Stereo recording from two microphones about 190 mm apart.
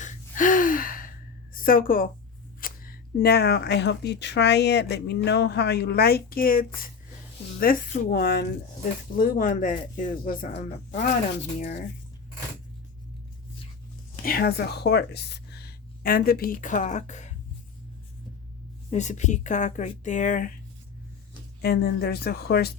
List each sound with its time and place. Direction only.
0.0 s gasp: 45° left (ahead or behind)
1.5 s a woman's voice: 45° left (ahead or behind)
14.3 s a woman's voice: 55° left (ahead or behind); by 17.3 s 40° left (ahead or behind)
18.9 s speech: 40° left (ahead or behind)
21.6 s speech: 55° left (ahead or behind)